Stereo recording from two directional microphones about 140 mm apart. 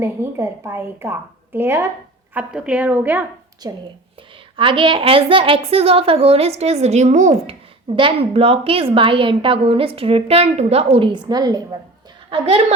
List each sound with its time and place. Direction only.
0.0 s a woman's voice: 20° right (ahead or behind)
3.6 s a woman's voice: 30° right (ahead or behind); by 7.5 s 55° right (ahead or behind)
7.9 s a woman's voice: 40° right (ahead or behind)